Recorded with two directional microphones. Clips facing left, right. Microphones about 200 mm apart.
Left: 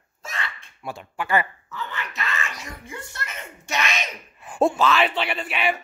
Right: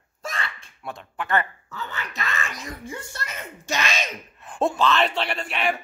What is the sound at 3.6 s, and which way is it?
Speech, 30° right (ahead or behind).